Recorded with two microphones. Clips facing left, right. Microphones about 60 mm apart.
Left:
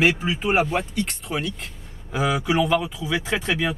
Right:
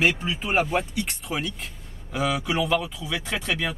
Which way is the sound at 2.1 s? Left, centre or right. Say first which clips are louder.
Left 3 dB; centre.